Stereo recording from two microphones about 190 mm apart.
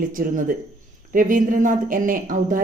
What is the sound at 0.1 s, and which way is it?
A woman's voice, 45° right (ahead or behind).